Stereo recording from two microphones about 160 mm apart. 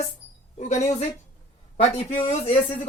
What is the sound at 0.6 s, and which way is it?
A man's voice, 45° left (ahead or behind).